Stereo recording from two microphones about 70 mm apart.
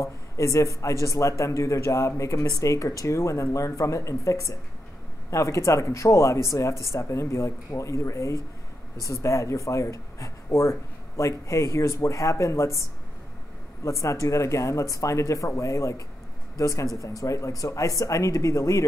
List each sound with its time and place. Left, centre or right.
0.0 s speech: left
13.8 s speech: left